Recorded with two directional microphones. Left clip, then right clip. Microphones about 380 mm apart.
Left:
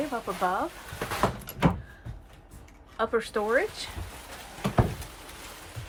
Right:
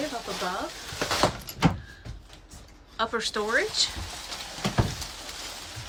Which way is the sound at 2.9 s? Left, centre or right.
Centre.